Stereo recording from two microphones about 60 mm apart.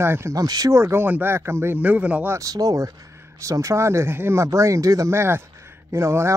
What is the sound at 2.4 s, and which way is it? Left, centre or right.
Speech, right.